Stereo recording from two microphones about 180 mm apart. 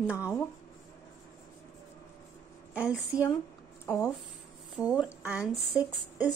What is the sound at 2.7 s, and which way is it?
Speech, 5° right (ahead or behind).